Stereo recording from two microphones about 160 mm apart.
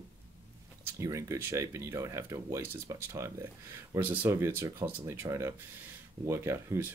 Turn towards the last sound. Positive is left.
turn(degrees=-15)  # may be behind; listen again after turning